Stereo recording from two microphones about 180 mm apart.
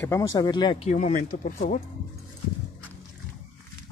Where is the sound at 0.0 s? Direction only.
15° left (ahead or behind).